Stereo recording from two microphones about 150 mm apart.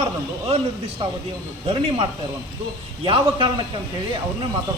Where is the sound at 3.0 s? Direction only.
35° right (ahead or behind).